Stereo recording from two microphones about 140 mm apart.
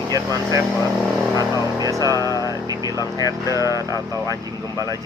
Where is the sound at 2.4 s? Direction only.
25° right (ahead or behind).